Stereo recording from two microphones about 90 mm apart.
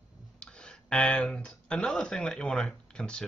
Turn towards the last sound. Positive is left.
turn(degrees=10)  # may be behind; listen again after turning